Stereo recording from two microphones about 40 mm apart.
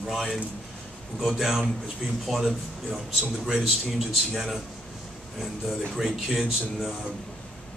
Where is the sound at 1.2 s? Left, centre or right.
Centre.